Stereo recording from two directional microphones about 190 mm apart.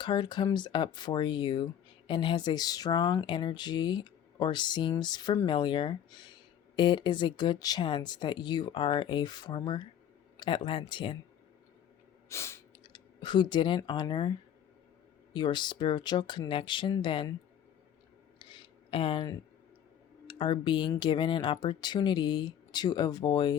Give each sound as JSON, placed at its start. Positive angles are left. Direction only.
{"t": 0.0, "sound": "speech", "side_deg": 25}
{"t": 12.3, "sound": "speech", "side_deg": 15}
{"t": 18.3, "sound": "a sound", "side_deg": 25}
{"t": 20.2, "sound": "speech", "side_deg": 25}